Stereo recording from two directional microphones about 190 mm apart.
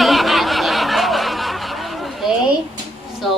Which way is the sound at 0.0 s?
Centre (ahead or behind).